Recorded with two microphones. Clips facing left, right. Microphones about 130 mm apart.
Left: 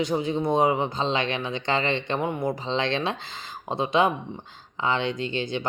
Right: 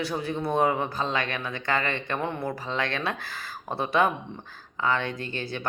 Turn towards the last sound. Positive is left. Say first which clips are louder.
# left 5 dB
turn(degrees=20)  # may be behind; listen again after turning